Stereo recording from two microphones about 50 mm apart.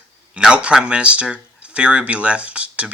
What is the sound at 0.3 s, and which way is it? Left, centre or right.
Speech, centre.